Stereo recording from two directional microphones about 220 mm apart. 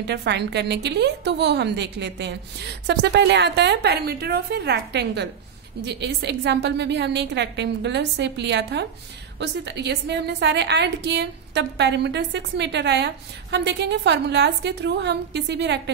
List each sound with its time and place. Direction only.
0.0 s a woman's voice: 50° right (ahead or behind)